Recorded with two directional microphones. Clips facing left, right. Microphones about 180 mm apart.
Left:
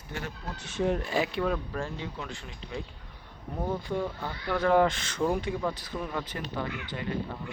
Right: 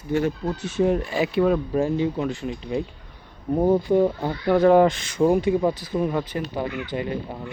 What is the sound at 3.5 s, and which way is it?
Speech, 35° right (ahead or behind).